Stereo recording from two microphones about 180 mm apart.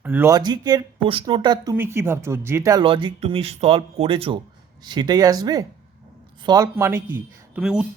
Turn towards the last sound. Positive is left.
turn(degrees=-5)  # may be behind; listen again after turning